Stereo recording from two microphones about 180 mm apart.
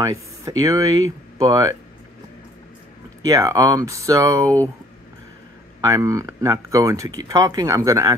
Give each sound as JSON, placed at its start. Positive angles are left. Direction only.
{"t": 0.0, "sound": "speech", "side_deg": -20}
{"t": 3.3, "sound": "speech", "side_deg": -20}
{"t": 5.8, "sound": "speech", "side_deg": -20}